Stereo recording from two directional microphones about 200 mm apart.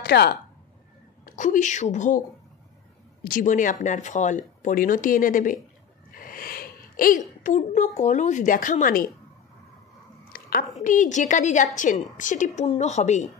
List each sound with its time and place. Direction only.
0.0 s speech: 55° left (ahead or behind)
1.2 s a woman's voice: 40° left (ahead or behind)
3.3 s a woman's voice: 40° left (ahead or behind)
10.3 s a woman's voice: 45° left (ahead or behind)